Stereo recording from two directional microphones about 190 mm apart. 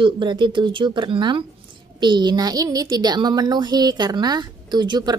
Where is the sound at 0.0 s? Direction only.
25° right (ahead or behind).